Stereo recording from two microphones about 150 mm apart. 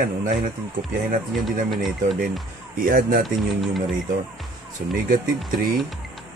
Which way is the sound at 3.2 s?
Centre (ahead or behind).